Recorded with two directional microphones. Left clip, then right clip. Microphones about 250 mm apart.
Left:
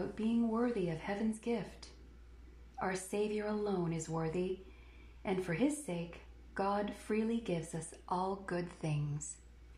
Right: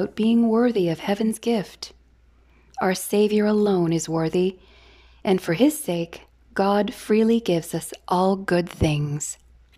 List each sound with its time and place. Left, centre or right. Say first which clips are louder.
0.1 s a woman's voice: right 15 dB; right